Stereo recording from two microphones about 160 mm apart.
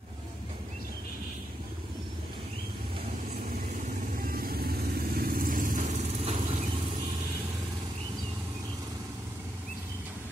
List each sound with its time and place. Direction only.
4.2 s vehicle: 65° right (ahead or behind); by 6.6 s 45° right (ahead or behind)